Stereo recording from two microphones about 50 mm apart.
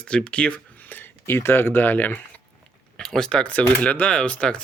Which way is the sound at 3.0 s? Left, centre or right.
Centre.